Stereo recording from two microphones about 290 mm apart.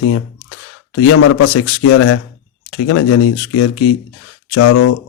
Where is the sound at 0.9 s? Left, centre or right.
Left.